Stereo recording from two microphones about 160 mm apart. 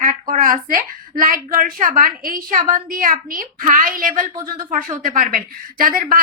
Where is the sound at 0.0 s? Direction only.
55° right (ahead or behind).